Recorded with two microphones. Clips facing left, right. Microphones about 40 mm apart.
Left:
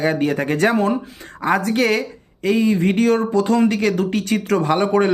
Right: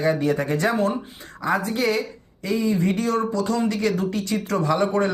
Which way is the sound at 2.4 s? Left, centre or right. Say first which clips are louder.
Left 5 dB; left.